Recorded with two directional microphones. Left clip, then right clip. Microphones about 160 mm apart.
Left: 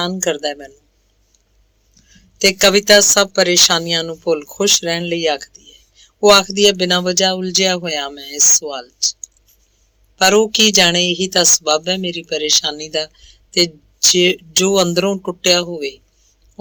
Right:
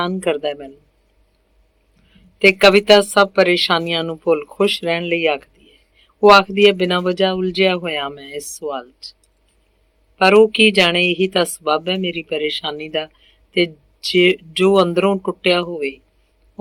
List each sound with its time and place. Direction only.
0.0 s speech: 40° left (ahead or behind)
2.1 s a woman's voice: 45° left (ahead or behind)
10.2 s speech: 45° left (ahead or behind)